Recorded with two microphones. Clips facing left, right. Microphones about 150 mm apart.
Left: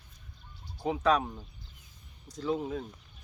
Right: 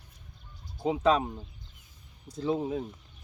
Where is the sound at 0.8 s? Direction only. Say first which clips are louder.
Right 2 dB; 20° right (ahead or behind).